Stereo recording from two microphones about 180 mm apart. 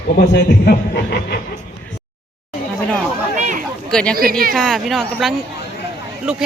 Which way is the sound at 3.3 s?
45° right (ahead or behind).